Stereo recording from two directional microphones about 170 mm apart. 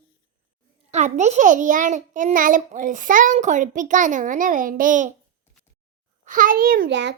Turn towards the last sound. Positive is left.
turn(degrees=-90)